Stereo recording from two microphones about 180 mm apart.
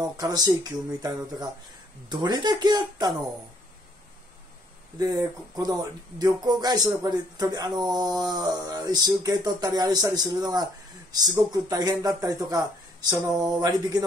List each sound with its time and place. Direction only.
0.2 s speech: 20° right (ahead or behind)
4.9 s speech: 20° right (ahead or behind)